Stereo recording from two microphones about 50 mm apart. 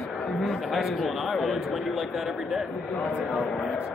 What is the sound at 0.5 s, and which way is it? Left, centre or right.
A man's voice, centre.